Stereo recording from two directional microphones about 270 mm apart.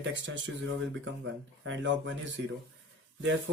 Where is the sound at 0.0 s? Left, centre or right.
Right.